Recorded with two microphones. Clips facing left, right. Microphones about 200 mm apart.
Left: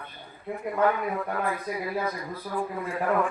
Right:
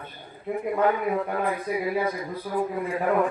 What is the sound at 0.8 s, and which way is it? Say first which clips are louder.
A man's voice: right 1 dB; 20° right (ahead or behind).